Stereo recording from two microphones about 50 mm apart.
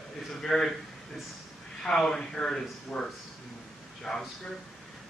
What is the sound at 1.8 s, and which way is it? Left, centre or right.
A man's voice, centre.